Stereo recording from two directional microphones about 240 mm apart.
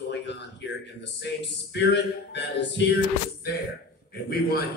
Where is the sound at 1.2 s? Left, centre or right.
Left.